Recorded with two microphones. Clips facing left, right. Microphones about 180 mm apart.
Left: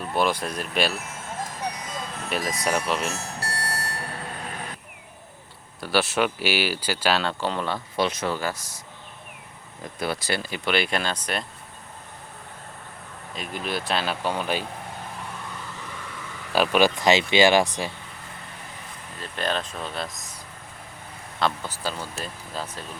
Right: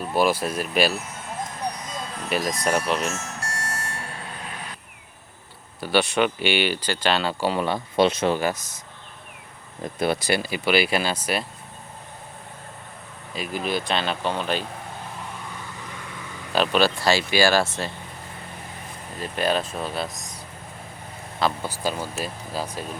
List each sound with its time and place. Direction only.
0.1 s speech: 5° right (ahead or behind)
2.0 s speech: centre (ahead or behind)
3.1 s bell: 35° left (ahead or behind)
5.8 s speech: centre (ahead or behind)
8.0 s speech: 25° right (ahead or behind)
10.0 s speech: 20° right (ahead or behind)
13.3 s speech: 5° right (ahead or behind)
16.5 s speech: 10° left (ahead or behind)
19.2 s speech: 10° right (ahead or behind)
21.3 s speech: 5° right (ahead or behind)